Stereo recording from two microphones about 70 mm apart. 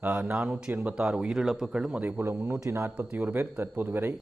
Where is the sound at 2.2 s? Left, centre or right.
Right.